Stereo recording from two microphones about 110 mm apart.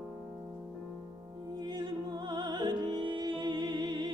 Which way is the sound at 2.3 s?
40° right (ahead or behind).